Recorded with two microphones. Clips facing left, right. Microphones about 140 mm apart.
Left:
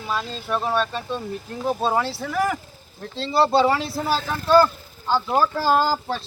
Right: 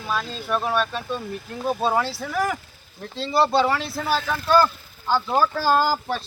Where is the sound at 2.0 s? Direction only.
25° left (ahead or behind).